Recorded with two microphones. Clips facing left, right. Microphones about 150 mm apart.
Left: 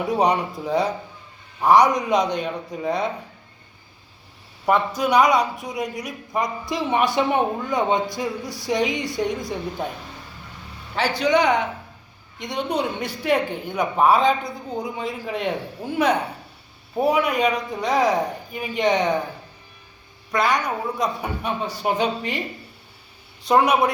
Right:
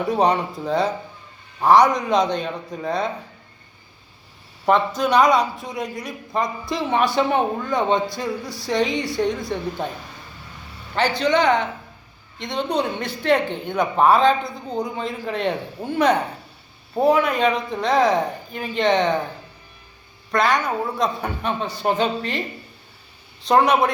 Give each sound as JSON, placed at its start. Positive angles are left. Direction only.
{"t": 0.2, "sound": "a woman's voice", "side_deg": 15}
{"t": 4.9, "sound": "a woman's voice", "side_deg": 10}
{"t": 10.9, "sound": "a woman's voice", "side_deg": 10}
{"t": 20.3, "sound": "a woman's voice", "side_deg": 10}